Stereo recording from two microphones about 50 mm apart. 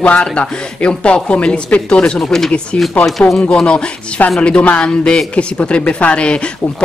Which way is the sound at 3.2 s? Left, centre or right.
Left.